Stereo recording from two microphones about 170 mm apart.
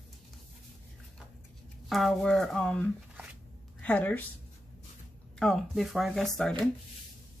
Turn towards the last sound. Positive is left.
turn(degrees=0)  # may be behind; listen again after turning